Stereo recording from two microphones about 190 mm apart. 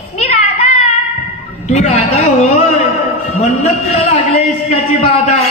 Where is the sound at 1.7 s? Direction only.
35° left (ahead or behind).